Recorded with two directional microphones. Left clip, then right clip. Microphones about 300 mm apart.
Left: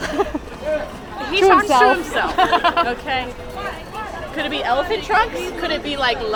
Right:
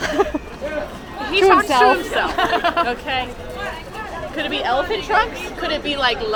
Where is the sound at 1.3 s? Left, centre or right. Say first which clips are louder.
Left 1 dB; centre.